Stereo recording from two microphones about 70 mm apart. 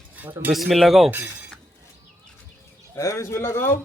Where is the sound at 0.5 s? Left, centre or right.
Centre.